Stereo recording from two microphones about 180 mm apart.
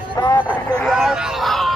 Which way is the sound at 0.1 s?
25° left (ahead or behind).